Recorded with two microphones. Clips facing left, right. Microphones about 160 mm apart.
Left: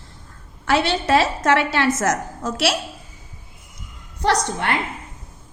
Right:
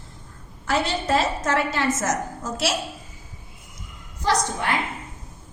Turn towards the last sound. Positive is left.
turn(degrees=65)  # may be behind; listen again after turning